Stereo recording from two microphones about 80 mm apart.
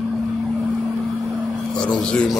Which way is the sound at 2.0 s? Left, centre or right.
Centre.